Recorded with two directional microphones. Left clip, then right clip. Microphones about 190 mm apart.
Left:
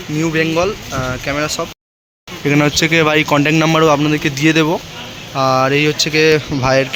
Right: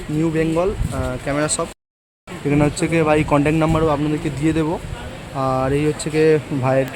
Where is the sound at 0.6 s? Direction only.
10° left (ahead or behind).